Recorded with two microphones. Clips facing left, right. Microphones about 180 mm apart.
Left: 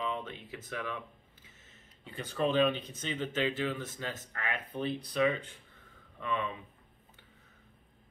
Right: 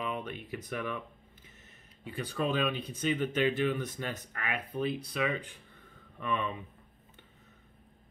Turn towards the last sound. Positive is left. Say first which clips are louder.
# right 1 dB
turn(degrees=-15)  # may be behind; listen again after turning